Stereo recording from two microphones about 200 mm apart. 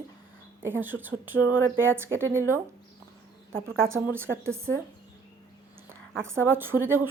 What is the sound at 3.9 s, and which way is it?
Speech, 10° right (ahead or behind).